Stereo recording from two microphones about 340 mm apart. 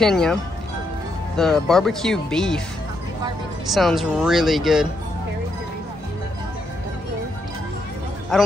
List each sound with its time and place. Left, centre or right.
0.0 s speech: centre
3.7 s speech: centre